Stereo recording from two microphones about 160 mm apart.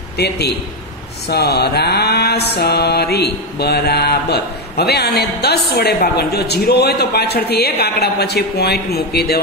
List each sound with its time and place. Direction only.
1.3 s mantra: 90° left